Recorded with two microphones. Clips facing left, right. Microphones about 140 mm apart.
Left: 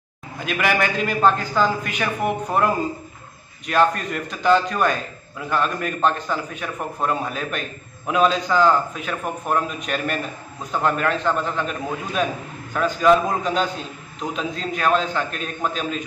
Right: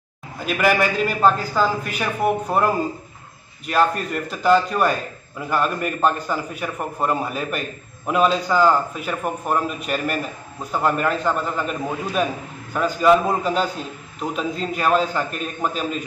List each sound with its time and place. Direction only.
0.5 s a man's voice: 5° right (ahead or behind)
3.7 s a man's voice: 5° right (ahead or behind)